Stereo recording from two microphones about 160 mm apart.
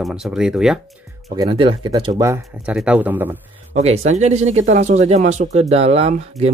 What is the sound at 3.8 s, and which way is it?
Speech, 45° right (ahead or behind).